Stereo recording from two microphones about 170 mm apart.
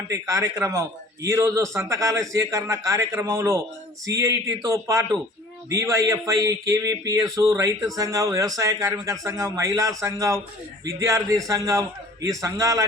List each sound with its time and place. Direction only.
0.1 s a man's voice: 15° right (ahead or behind)